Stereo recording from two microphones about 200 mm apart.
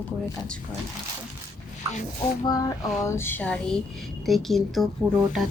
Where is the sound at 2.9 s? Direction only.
15° left (ahead or behind).